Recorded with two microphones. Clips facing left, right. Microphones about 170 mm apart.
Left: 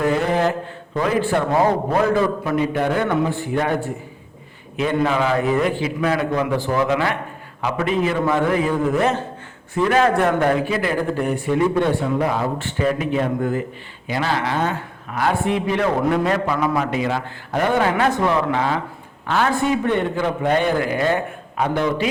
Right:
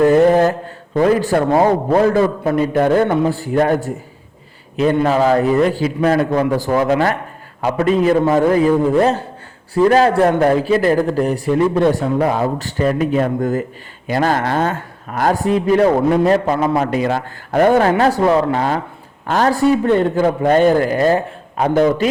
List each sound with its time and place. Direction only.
0.0 s mantra: 45° right (ahead or behind)
1.2 s a man's voice: 40° right (ahead or behind)